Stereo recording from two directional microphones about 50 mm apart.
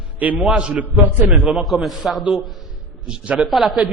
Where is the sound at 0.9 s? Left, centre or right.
Right.